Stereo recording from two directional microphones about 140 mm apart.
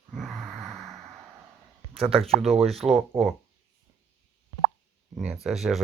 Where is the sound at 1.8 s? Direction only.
40° right (ahead or behind).